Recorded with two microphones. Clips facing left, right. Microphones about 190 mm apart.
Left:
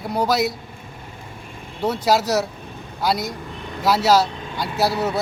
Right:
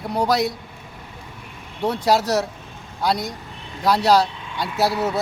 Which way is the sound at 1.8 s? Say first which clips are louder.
Even; centre (ahead or behind).